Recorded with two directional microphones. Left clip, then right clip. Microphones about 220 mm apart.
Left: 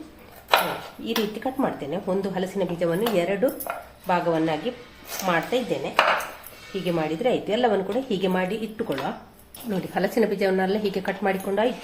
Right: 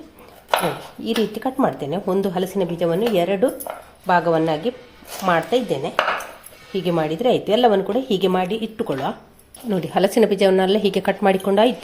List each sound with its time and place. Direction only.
1.0 s a woman's voice: 45° right (ahead or behind)